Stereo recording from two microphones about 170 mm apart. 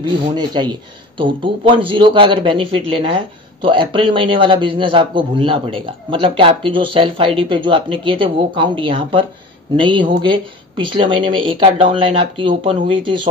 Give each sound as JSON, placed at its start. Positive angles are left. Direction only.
{"t": 0.0, "sound": "a man's voice", "side_deg": -25}